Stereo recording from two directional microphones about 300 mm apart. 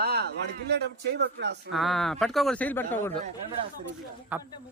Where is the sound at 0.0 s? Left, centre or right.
Right.